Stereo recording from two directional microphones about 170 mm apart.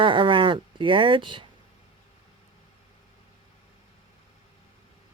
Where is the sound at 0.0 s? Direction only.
30° right (ahead or behind).